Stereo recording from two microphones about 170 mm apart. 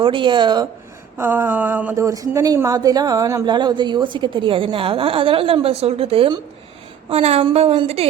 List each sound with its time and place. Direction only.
0.0 s speech: 30° right (ahead or behind)
1.2 s a woman's voice: 10° right (ahead or behind); by 8.0 s 35° right (ahead or behind)